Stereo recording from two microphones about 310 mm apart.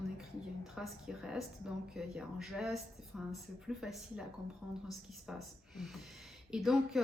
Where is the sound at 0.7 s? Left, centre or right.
Centre.